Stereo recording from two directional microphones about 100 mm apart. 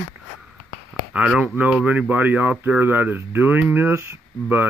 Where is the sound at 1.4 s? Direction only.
15° right (ahead or behind).